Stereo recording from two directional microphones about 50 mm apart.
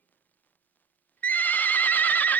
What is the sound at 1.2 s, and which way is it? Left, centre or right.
Horse, left.